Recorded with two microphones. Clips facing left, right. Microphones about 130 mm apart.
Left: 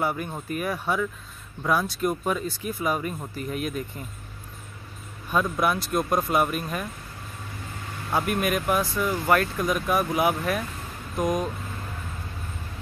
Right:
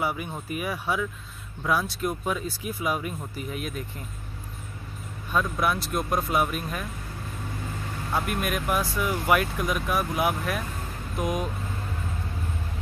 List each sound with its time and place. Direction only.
0.0 s speech: 5° right (ahead or behind)
5.3 s speech: centre (ahead or behind)
8.1 s speech: centre (ahead or behind)